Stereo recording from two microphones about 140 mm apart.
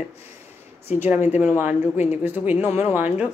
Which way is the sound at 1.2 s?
55° left (ahead or behind).